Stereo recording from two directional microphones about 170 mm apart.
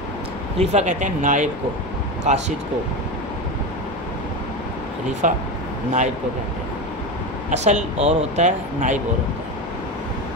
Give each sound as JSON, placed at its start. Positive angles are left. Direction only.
{"t": 0.6, "sound": "speech", "side_deg": -45}
{"t": 5.2, "sound": "speech", "side_deg": -45}
{"t": 7.4, "sound": "speech", "side_deg": -45}